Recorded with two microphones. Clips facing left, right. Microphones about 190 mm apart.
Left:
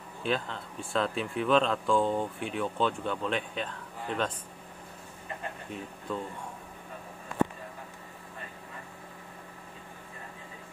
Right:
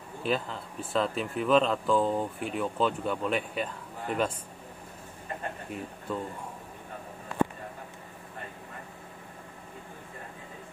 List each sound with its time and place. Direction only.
0.2 s speech: 5° right (ahead or behind)
6.1 s speech: 5° right (ahead or behind)